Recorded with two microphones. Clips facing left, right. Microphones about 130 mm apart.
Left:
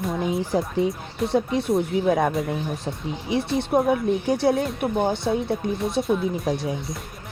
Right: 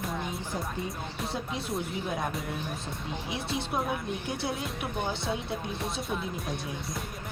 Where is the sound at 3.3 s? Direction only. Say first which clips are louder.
Left 12 dB; 60° left (ahead or behind).